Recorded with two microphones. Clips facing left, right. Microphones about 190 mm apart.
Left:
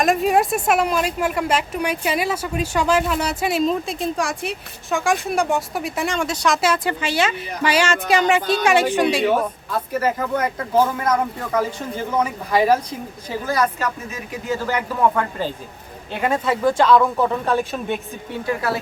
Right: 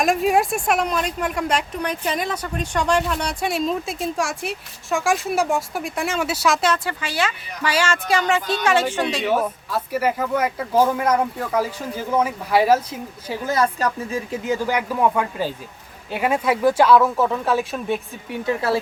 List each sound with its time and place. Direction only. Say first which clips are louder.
0.0 s a woman's voice: left 1 dB; centre (ahead or behind)
6.6 s speech: left 1 dB; 10° left (ahead or behind)
6.8 s speech: left 4 dB; 20° left (ahead or behind)
9.2 s speech: left 2 dB; centre (ahead or behind)
13.7 s speech: right 3 dB; 35° right (ahead or behind)
14.4 s speech: left 1 dB; 15° right (ahead or behind)
18.3 s speech: right 2 dB; 25° right (ahead or behind)